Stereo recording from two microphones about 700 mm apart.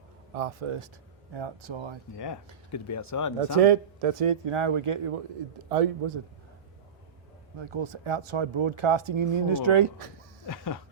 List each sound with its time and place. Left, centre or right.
0.3 s speech: right
2.1 s speech: left
3.6 s speech: right
5.6 s a man's voice: right
7.6 s speech: right
10.4 s a sound: left